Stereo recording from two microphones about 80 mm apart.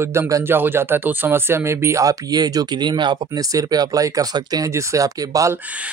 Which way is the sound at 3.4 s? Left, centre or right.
Right.